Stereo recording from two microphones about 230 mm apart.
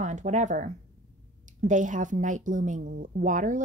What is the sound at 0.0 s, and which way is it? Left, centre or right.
A woman's voice, right.